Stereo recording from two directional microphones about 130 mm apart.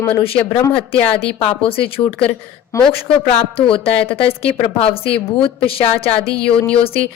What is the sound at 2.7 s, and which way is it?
Speech, 25° left (ahead or behind).